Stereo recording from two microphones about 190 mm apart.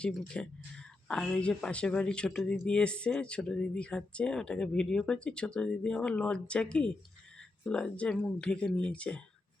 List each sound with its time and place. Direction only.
0.0 s speech: 5° left (ahead or behind)